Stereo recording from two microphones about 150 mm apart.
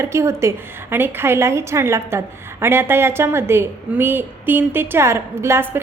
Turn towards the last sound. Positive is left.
turn(degrees=-15)  # may be behind; listen again after turning